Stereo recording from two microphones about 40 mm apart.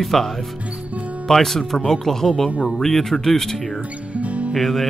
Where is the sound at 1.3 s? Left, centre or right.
Centre.